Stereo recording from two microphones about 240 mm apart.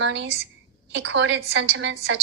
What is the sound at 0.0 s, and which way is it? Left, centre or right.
A woman's voice, right.